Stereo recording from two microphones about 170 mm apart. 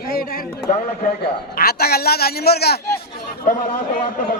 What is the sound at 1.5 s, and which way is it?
A man's voice, 65° left (ahead or behind).